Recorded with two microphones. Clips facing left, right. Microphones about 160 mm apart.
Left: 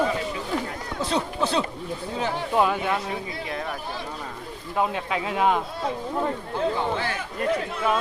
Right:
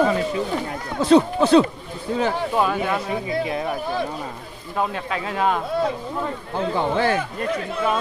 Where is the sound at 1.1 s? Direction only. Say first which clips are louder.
Right 12 dB; 85° right.